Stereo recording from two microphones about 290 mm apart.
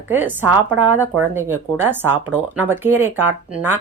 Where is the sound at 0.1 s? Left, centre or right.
Centre.